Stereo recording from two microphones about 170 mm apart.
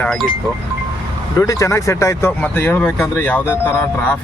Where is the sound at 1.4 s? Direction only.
20° left (ahead or behind).